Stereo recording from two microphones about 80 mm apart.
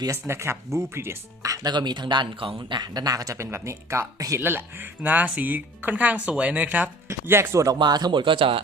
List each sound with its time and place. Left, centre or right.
0.3 s speech: right
1.4 s music: right
1.7 s speech: right
2.6 s speech: right
4.4 s speech: right
7.1 s speech: right
7.8 s speech: right